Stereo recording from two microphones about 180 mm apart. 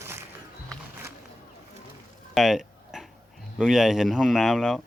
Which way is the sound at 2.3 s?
Centre (ahead or behind).